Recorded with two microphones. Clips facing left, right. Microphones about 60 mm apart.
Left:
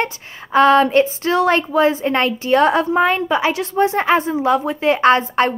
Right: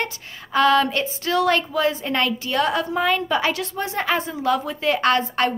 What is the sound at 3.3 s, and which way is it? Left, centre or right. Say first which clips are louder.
A woman's voice: left 4 dB; centre.